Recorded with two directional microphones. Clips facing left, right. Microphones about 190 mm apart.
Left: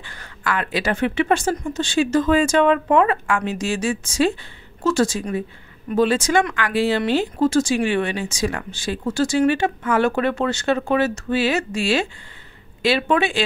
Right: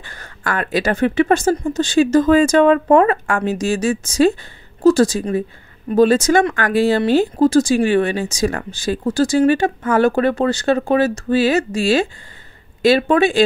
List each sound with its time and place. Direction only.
0.0 s speech: 45° right (ahead or behind)